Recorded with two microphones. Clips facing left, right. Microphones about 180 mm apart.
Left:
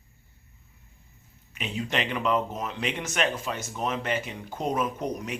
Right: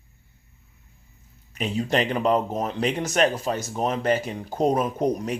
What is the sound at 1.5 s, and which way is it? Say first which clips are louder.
Speech: right 6 dB; 40° right (ahead or behind).